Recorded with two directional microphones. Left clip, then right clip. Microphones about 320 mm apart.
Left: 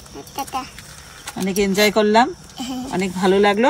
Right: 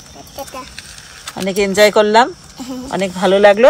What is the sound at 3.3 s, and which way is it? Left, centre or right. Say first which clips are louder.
Speech: right 7 dB; right.